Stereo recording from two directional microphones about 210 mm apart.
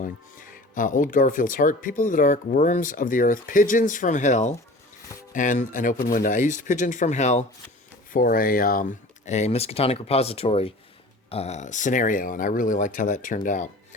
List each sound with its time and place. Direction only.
0.0 s speech: 40° left (ahead or behind)